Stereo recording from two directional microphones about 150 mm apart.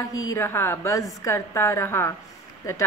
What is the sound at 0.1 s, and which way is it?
A woman's voice, 20° left (ahead or behind).